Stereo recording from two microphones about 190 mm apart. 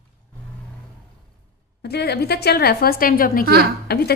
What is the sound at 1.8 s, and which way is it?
A woman's voice, 60° left (ahead or behind).